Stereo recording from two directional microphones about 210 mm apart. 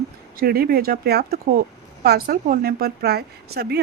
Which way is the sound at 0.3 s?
45° right (ahead or behind).